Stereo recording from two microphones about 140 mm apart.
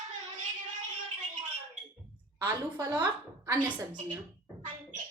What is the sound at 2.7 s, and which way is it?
A woman's voice, 25° right (ahead or behind).